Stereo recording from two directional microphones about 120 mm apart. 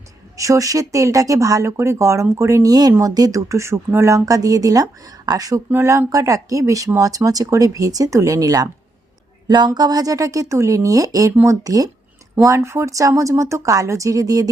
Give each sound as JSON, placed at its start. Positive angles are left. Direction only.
{"t": 0.3, "sound": "speech", "side_deg": -25}